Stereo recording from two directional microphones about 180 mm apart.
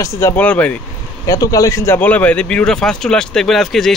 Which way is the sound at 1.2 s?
20° left (ahead or behind).